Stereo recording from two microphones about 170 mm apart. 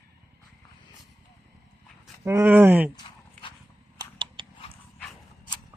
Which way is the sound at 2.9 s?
30° left (ahead or behind).